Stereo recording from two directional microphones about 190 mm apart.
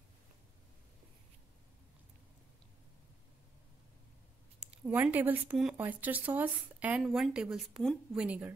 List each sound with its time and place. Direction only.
4.6 s speech: 5° right (ahead or behind)